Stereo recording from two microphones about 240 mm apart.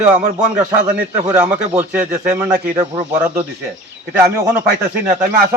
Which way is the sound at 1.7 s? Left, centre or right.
Centre.